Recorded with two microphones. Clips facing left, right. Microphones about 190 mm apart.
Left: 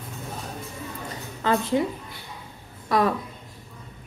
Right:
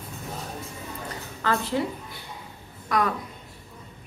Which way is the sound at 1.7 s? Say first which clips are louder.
Left 3 dB; 20° left (ahead or behind).